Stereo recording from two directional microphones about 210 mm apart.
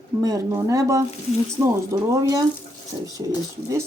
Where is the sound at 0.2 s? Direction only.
15° right (ahead or behind).